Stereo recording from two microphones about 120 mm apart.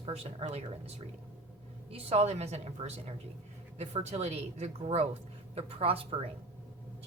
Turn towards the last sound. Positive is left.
turn(degrees=-50)  # may be behind; listen again after turning